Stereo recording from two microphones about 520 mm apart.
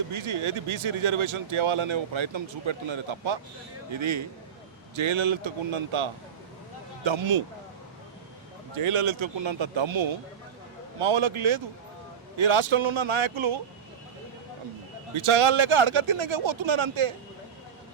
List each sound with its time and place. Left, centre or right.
0.1 s speech: right
8.8 s speech: right
15.2 s speech: right